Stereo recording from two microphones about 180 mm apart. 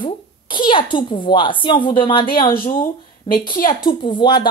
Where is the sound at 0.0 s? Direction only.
25° left (ahead or behind).